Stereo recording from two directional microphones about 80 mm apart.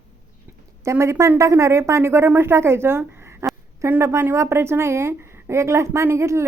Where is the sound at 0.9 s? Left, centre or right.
Right.